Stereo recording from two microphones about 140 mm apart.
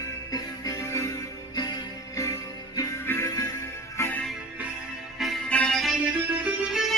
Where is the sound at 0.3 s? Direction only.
25° left (ahead or behind).